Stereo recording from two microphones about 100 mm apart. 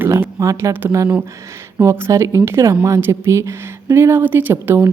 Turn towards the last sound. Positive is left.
turn(degrees=-20)  # may be behind; listen again after turning